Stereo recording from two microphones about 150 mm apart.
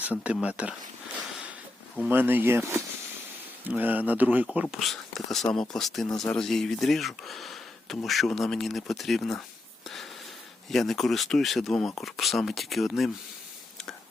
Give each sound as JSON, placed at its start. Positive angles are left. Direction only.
{"t": 0.0, "sound": "speech", "side_deg": -10}
{"t": 2.0, "sound": "speech", "side_deg": -15}
{"t": 4.6, "sound": "speech", "side_deg": 0}
{"t": 10.7, "sound": "speech", "side_deg": 0}